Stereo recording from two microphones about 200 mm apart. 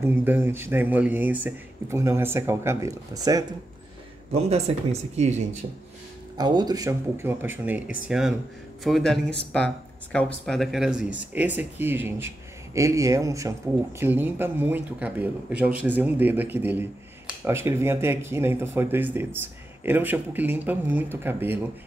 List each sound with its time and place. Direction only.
0.0 s speech: 10° right (ahead or behind)
4.3 s speech: 30° right (ahead or behind)
6.3 s speech: 20° right (ahead or behind)